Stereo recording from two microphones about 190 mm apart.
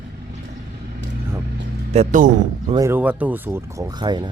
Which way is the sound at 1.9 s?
40° right (ahead or behind).